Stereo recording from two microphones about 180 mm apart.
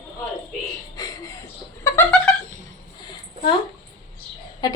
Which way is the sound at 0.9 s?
20° left (ahead or behind).